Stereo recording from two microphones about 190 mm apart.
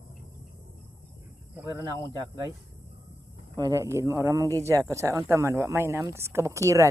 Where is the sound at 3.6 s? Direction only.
15° right (ahead or behind).